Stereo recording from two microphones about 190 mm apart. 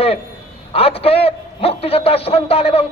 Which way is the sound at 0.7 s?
30° left (ahead or behind).